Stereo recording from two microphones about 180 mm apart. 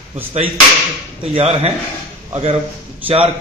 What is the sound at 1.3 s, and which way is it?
Speech, 35° right (ahead or behind).